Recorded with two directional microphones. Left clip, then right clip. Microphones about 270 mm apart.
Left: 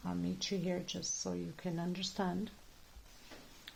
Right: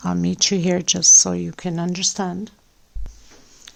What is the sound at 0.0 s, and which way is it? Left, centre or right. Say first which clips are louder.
Speech: right 19 dB; right.